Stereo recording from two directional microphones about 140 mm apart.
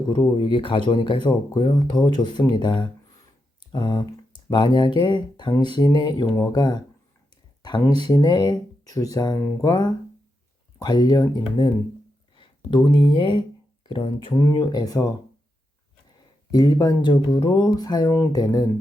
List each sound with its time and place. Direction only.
0.1 s speech: 35° left (ahead or behind)
16.5 s speech: 25° left (ahead or behind)